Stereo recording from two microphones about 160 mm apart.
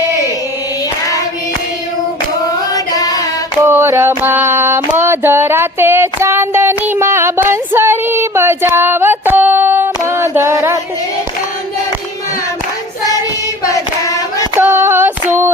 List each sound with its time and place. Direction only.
2.7 s singing: 25° left (ahead or behind)
3.6 s music: 15° right (ahead or behind)
4.2 s a sound: 15° right (ahead or behind)
13.7 s hands: 20° left (ahead or behind)
14.5 s female singing: 15° right (ahead or behind)